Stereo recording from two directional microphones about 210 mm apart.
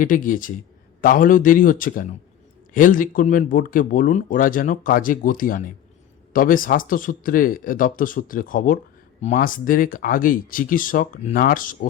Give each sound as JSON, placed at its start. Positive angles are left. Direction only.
{"t": 0.0, "sound": "speech", "side_deg": 40}